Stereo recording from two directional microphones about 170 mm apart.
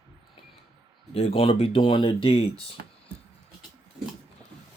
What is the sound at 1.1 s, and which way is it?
Speech, 35° left (ahead or behind).